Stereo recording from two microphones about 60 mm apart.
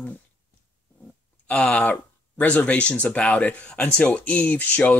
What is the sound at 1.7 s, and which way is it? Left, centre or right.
Speech, left.